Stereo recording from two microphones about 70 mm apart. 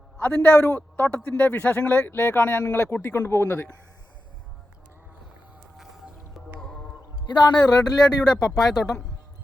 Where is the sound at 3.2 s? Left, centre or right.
Left.